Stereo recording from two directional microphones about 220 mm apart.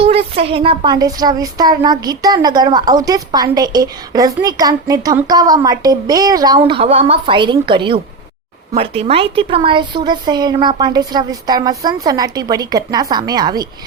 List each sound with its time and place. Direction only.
0.0 s a woman's voice: 25° right (ahead or behind)